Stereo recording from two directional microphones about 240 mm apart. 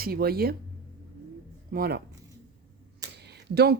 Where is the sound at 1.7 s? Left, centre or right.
Right.